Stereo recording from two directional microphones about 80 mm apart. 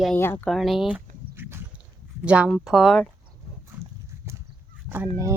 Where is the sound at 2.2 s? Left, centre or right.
Centre.